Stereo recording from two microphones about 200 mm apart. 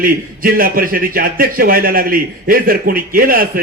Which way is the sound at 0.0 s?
45° right (ahead or behind).